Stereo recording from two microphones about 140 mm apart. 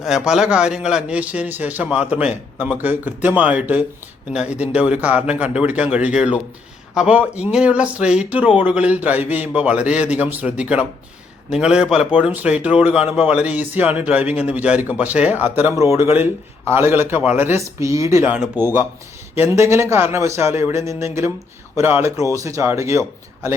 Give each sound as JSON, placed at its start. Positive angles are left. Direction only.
{"t": 0.0, "sound": "a man's voice", "side_deg": -5}